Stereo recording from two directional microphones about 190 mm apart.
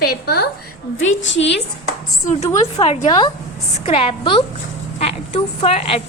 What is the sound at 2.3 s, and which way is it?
A woman's voice, 35° left (ahead or behind).